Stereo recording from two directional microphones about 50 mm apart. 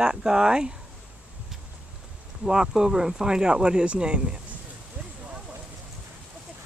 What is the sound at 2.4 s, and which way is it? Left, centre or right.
Speech, centre.